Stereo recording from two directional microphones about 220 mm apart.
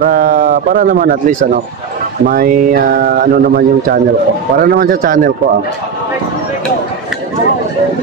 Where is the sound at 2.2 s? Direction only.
40° right (ahead or behind).